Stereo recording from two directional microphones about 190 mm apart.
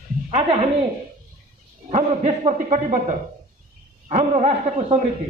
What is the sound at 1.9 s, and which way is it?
A woman's voice, 35° right (ahead or behind).